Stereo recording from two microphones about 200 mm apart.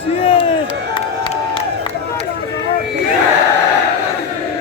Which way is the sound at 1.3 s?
25° left (ahead or behind).